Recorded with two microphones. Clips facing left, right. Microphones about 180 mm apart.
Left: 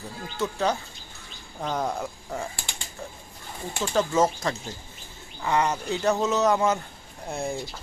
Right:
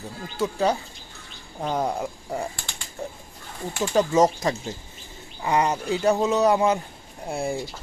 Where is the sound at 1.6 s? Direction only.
10° right (ahead or behind).